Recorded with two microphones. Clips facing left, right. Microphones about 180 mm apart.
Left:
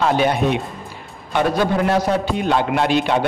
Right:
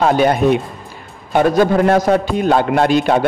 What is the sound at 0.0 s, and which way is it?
A man's voice, 45° right (ahead or behind).